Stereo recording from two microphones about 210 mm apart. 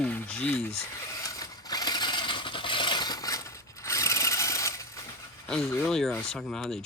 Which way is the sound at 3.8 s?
15° left (ahead or behind).